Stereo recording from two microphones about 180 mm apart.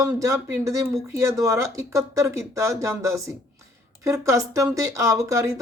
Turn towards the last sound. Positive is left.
turn(degrees=-15)  # may be behind; listen again after turning